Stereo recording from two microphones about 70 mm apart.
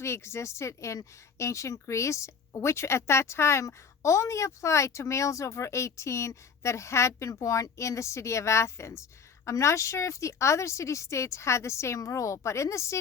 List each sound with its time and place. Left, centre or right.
0.0 s speech: left